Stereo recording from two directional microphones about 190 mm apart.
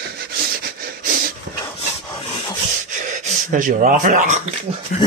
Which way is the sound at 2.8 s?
45° right (ahead or behind).